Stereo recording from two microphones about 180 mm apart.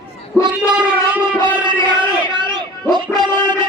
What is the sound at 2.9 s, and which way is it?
Music, 25° right (ahead or behind).